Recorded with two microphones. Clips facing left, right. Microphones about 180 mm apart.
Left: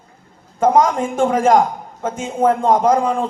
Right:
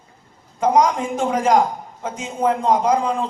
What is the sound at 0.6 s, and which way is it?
A man's voice, 50° left (ahead or behind).